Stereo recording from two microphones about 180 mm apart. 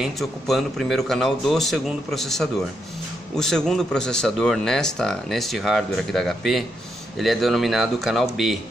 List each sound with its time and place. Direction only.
0.0 s speech: centre (ahead or behind)